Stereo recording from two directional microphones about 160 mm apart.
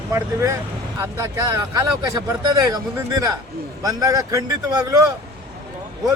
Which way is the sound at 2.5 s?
20° right (ahead or behind).